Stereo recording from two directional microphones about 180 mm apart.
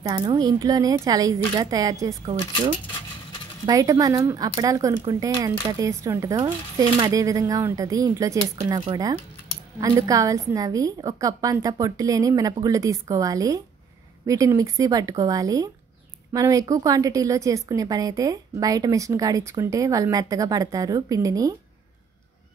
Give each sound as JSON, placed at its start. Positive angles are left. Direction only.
{"t": 0.0, "sound": "speech", "side_deg": -20}
{"t": 3.6, "sound": "speech", "side_deg": -20}